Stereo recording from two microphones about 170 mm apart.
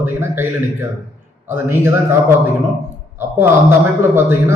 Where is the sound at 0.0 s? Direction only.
15° right (ahead or behind).